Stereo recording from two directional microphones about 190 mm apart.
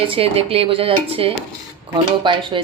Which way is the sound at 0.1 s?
30° right (ahead or behind).